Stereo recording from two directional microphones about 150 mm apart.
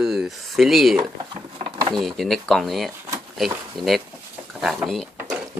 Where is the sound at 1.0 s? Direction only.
35° right (ahead or behind).